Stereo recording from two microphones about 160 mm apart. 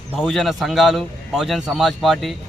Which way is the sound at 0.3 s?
Centre (ahead or behind).